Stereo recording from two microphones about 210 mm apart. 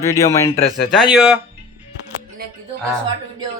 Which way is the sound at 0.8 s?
Centre (ahead or behind).